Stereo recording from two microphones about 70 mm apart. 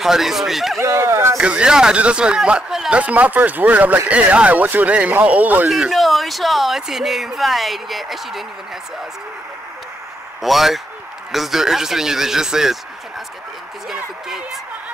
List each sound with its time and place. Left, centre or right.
0.0 s speech: centre
0.7 s speech: right
1.4 s speech: centre
5.7 s speech: centre
10.4 s speech: centre
13.9 s speech: centre